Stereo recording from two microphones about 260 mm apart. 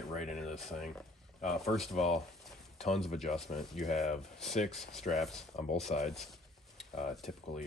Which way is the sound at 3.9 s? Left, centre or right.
Left.